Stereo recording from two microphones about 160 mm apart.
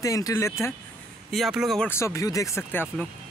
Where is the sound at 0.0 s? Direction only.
20° left (ahead or behind).